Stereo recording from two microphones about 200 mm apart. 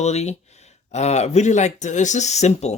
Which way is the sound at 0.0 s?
35° left (ahead or behind).